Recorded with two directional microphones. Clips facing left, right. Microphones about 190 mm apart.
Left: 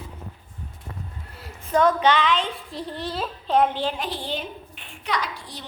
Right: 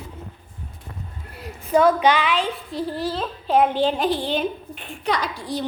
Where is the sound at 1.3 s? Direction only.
15° right (ahead or behind).